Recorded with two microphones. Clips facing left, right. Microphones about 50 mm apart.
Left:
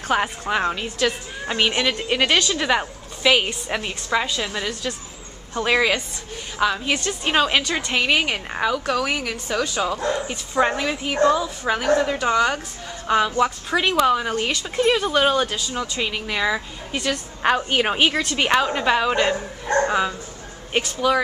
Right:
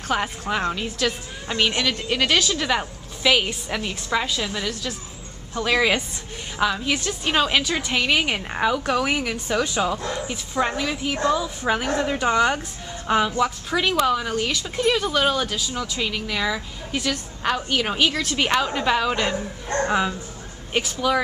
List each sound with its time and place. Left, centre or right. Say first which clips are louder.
0.1 s a woman's voice: left 3 dB; centre
1.4 s a woman's voice: left 2 dB; centre
10.6 s a woman's voice: left 3 dB; centre
11.6 s a woman's voice: left 4 dB; centre
13.4 s a woman's voice: left 2 dB; centre
17.4 s a woman's voice: left 4 dB; left
18.3 s a woman's voice: left 2 dB; centre
19.9 s a woman's voice: even; centre